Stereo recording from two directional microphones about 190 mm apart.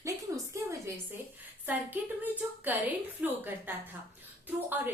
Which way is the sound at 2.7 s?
10° right (ahead or behind).